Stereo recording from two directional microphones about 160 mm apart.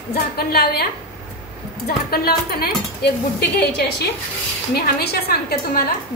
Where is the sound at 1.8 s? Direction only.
70° left (ahead or behind).